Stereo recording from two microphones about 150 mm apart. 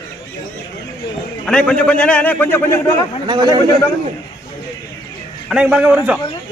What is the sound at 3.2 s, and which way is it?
Speech, 25° right (ahead or behind).